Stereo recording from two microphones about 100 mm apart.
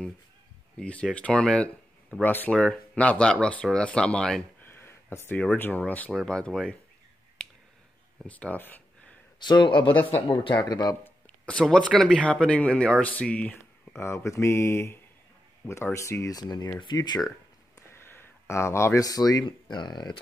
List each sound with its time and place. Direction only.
0.7 s speech: 10° left (ahead or behind)
4.6 s speech: 25° left (ahead or behind); by 6.8 s 5° left (ahead or behind)
8.3 s speech: 15° left (ahead or behind)
9.4 s speech: 50° left (ahead or behind)
10.6 s speech: 40° left (ahead or behind)
11.4 s speech: 10° left (ahead or behind)
13.9 s speech: 25° left (ahead or behind); by 17.3 s 45° left (ahead or behind)
17.7 s a sound: 25° left (ahead or behind)
19.4 s speech: 45° left (ahead or behind)